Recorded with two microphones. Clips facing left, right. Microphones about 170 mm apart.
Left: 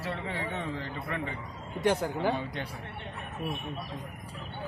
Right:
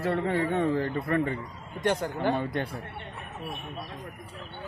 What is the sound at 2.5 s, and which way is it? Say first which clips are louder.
Speech: right 7 dB; 50° right (ahead or behind).